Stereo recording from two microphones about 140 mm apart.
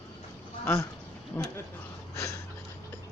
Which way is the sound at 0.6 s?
20° left (ahead or behind).